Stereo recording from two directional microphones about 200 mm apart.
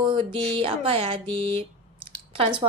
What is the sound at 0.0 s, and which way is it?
A woman's voice, 25° right (ahead or behind).